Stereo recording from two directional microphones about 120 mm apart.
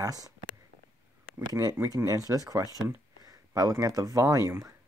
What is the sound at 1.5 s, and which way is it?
Speech, 30° right (ahead or behind).